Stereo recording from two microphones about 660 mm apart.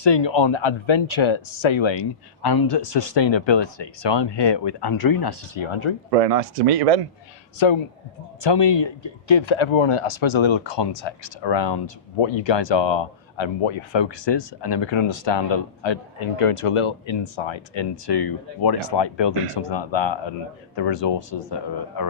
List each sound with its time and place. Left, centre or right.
0.0 s speech: left
2.8 s speech: left
6.1 s speech: right
8.4 s speech: left
22.0 s speech: left